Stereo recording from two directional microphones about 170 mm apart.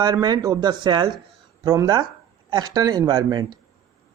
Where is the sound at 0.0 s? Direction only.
25° right (ahead or behind).